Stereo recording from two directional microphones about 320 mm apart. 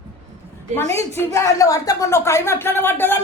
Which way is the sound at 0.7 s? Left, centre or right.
Centre.